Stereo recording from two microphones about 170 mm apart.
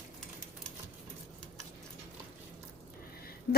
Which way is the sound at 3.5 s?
70° left (ahead or behind).